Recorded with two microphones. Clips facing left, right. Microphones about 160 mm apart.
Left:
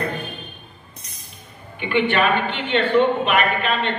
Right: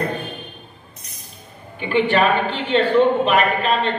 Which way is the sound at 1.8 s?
35° right (ahead or behind).